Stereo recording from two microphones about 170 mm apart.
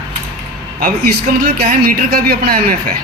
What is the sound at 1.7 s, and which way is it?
Speech, 60° right (ahead or behind).